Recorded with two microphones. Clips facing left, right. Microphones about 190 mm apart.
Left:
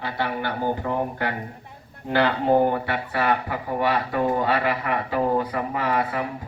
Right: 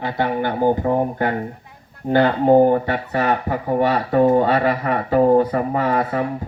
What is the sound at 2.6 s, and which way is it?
Speech, 40° right (ahead or behind).